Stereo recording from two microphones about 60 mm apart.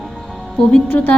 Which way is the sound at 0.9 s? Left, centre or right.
Left.